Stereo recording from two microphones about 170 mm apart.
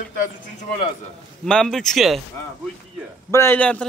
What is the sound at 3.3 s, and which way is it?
Speech, 15° left (ahead or behind).